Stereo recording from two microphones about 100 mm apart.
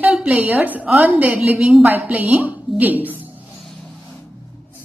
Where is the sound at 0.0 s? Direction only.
10° right (ahead or behind).